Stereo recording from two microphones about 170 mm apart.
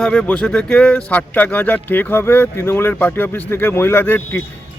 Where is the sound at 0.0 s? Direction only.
5° left (ahead or behind).